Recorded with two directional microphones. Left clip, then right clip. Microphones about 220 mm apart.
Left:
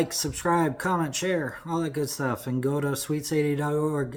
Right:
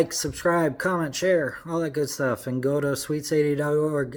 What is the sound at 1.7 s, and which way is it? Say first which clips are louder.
Speech: left 1 dB; 90° left.